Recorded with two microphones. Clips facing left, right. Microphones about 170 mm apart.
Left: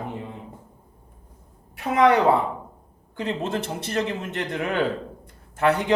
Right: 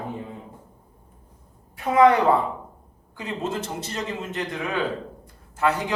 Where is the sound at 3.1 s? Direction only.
60° left (ahead or behind).